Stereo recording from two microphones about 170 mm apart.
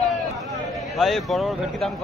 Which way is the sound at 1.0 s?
Centre (ahead or behind).